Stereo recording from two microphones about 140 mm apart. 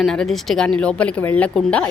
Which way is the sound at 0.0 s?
5° left (ahead or behind).